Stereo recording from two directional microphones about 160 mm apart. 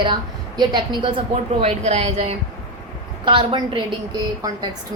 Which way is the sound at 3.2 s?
30° right (ahead or behind).